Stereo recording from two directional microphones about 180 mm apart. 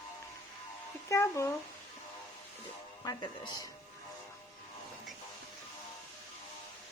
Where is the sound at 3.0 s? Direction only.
20° left (ahead or behind).